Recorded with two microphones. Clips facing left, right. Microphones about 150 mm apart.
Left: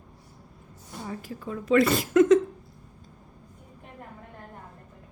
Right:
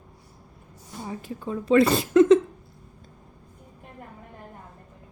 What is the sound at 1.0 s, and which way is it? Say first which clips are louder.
A woman's voice: right 3 dB; 20° right (ahead or behind).